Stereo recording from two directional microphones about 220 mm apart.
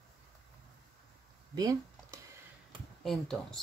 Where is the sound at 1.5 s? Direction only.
15° right (ahead or behind).